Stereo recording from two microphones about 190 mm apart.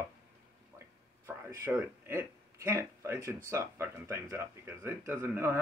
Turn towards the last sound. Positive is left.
turn(degrees=-10)  # may be behind; listen again after turning